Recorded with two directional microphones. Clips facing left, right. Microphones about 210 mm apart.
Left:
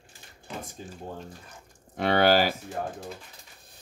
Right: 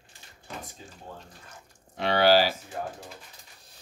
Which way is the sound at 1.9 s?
50° left (ahead or behind).